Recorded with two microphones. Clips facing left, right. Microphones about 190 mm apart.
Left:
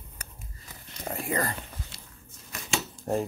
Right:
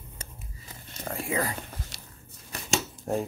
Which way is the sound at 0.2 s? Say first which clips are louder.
Right 2 dB; 25° right (ahead or behind).